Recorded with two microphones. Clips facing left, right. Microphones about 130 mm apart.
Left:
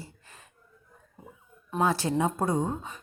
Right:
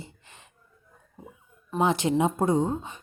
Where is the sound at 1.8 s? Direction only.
20° right (ahead or behind).